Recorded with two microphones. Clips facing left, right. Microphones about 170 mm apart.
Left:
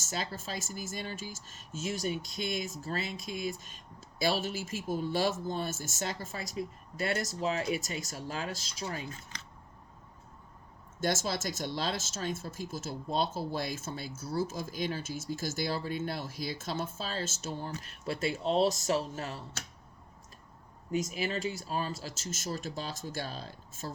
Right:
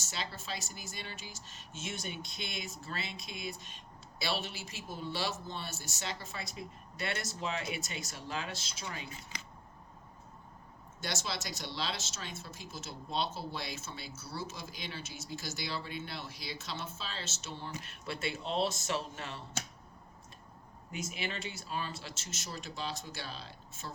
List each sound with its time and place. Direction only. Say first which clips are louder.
0.0 s speech: left 5 dB; 45° left (ahead or behind)
11.0 s speech: left 7 dB; 45° left (ahead or behind)
21.0 s speech: left 2 dB; 40° left (ahead or behind)